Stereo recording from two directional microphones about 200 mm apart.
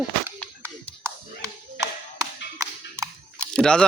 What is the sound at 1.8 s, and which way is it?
Music, 15° right (ahead or behind).